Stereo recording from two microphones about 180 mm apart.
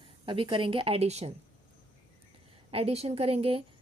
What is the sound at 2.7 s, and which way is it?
Speech, 35° right (ahead or behind).